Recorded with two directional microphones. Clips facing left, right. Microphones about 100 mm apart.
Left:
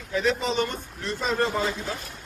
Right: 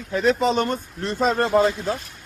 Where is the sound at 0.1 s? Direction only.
50° right (ahead or behind).